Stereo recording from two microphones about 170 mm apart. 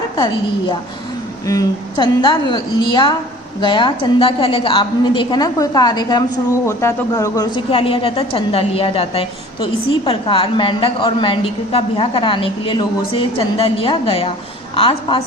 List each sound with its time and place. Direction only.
0.2 s a woman's voice: 25° left (ahead or behind)
7.7 s a woman's voice: 35° left (ahead or behind)